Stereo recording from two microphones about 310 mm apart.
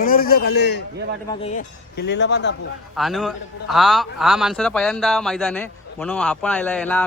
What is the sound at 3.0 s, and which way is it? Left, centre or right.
Speech, centre.